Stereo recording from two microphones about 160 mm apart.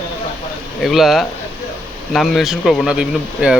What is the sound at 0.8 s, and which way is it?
Speech, centre (ahead or behind).